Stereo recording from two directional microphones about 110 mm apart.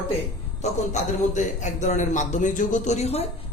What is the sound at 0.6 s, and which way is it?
A man's voice, 90° left.